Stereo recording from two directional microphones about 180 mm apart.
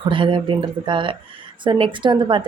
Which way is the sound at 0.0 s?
25° right (ahead or behind).